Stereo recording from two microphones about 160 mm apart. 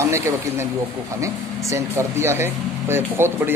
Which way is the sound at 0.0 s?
15° right (ahead or behind).